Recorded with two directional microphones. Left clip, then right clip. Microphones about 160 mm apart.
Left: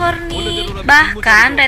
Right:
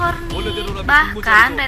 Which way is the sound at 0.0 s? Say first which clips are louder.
Left 3 dB; 20° left (ahead or behind).